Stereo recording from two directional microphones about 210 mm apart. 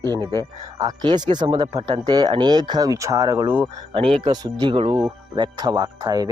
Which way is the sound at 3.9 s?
25° right (ahead or behind).